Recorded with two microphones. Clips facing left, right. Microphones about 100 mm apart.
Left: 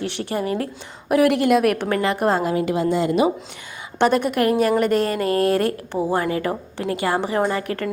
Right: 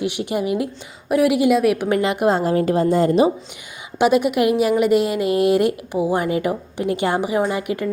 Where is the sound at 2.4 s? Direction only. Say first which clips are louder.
Right 3 dB; 40° right (ahead or behind).